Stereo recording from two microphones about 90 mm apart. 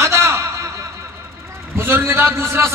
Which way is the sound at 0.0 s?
30° right (ahead or behind).